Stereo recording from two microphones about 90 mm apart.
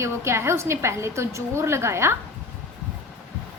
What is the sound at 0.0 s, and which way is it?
A woman's voice, 30° right (ahead or behind).